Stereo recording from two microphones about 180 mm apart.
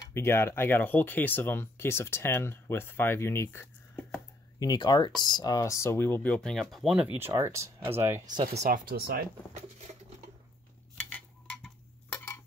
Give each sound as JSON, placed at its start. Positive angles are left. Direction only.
{"t": 0.0, "sound": "speech", "side_deg": 15}
{"t": 4.6, "sound": "speech", "side_deg": 20}
{"t": 8.6, "sound": "speech", "side_deg": -55}
{"t": 11.1, "sound": "a sound", "side_deg": 5}